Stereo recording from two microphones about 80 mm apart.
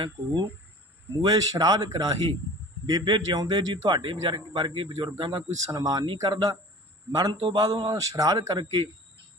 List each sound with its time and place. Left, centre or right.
1.2 s a man's voice: right
2.8 s speech: right
3.2 s speech: right
5.5 s a man's voice: right